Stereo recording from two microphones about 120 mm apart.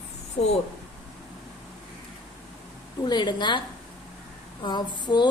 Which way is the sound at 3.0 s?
40° left (ahead or behind).